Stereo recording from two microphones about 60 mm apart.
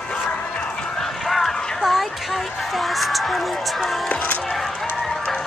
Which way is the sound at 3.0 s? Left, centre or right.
Centre.